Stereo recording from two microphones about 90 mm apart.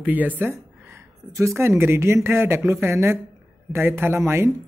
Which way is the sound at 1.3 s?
30° right (ahead or behind).